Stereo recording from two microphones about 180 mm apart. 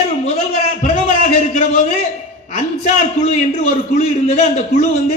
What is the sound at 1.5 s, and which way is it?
A man's voice, 40° left (ahead or behind).